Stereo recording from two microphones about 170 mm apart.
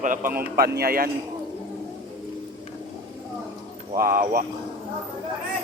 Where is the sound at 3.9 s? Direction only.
55° right (ahead or behind).